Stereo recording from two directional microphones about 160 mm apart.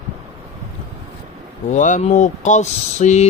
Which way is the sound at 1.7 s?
50° left (ahead or behind).